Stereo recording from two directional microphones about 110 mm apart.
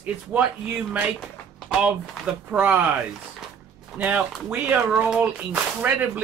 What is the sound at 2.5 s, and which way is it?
Speech, 15° right (ahead or behind).